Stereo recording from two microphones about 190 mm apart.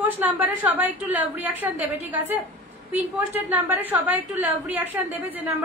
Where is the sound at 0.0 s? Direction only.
10° right (ahead or behind).